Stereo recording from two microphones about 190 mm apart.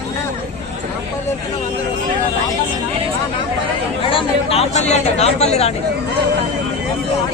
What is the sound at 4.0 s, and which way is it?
Speech, 25° left (ahead or behind).